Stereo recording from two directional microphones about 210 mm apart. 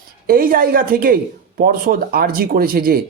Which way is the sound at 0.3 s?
45° right (ahead or behind).